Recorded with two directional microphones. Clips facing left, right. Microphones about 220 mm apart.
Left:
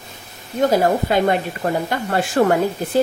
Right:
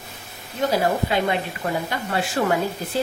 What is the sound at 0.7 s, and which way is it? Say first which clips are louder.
Speech: left 3 dB; 45° left (ahead or behind).